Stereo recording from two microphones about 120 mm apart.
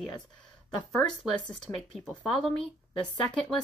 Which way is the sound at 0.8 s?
10° left (ahead or behind).